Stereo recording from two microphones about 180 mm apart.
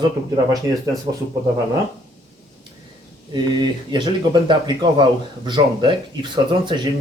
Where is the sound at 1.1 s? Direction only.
20° right (ahead or behind).